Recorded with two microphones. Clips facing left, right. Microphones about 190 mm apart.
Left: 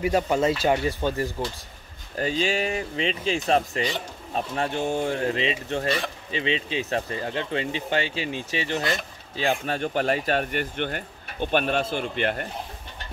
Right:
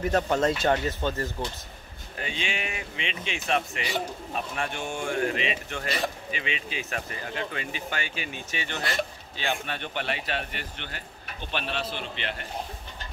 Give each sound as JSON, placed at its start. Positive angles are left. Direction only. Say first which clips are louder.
{"t": 0.0, "sound": "speech", "louder": "left 2 dB", "side_deg": 10}
{"t": 2.1, "sound": "speech", "louder": "left 9 dB", "side_deg": 40}
{"t": 4.4, "sound": "speech", "louder": "left 5 dB", "side_deg": 25}
{"t": 4.7, "sound": "speech", "louder": "left 4 dB", "side_deg": 40}